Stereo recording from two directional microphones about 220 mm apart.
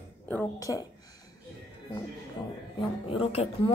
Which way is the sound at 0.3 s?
10° left (ahead or behind).